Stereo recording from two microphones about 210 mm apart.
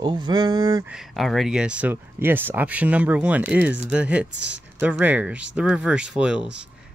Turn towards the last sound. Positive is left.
turn(degrees=-5)  # may be behind; listen again after turning